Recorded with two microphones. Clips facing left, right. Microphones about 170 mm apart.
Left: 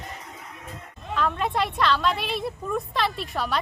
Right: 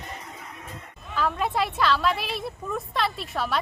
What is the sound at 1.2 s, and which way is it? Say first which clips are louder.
A woman's voice: even; centre (ahead or behind).